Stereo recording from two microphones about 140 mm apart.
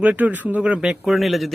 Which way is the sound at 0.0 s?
10° right (ahead or behind).